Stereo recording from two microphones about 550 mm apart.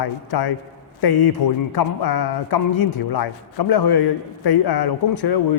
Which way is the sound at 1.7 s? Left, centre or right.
Left.